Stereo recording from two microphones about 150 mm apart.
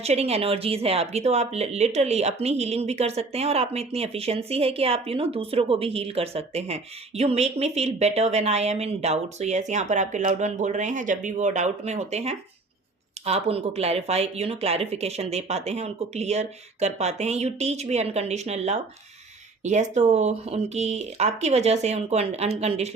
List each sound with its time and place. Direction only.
0.0 s speech: 45° right (ahead or behind)